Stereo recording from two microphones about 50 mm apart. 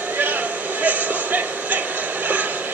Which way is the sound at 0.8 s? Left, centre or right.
Right.